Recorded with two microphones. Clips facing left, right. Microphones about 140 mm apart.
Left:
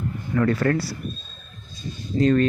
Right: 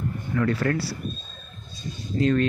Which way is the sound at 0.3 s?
45° left (ahead or behind).